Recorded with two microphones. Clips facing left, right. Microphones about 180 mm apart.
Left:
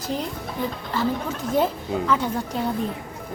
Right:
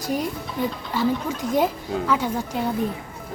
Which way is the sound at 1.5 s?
10° right (ahead or behind).